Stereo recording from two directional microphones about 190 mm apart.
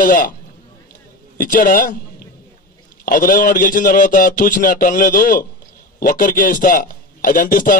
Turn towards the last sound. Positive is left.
turn(degrees=45)  # may be behind; listen again after turning